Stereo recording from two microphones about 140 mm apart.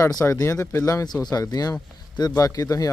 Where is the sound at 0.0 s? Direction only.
20° left (ahead or behind).